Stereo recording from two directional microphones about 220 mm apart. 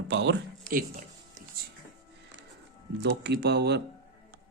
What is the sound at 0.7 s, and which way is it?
Music, 35° right (ahead or behind).